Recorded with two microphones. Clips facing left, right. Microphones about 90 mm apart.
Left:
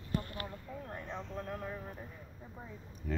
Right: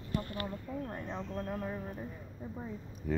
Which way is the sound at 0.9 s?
10° right (ahead or behind).